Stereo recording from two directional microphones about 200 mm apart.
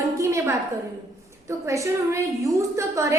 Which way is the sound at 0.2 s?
15° right (ahead or behind).